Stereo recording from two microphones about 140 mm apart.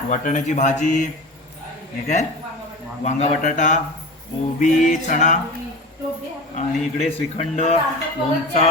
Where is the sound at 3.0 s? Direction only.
55° left (ahead or behind).